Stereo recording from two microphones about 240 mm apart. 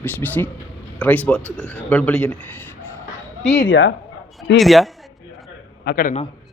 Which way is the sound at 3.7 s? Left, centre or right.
Left.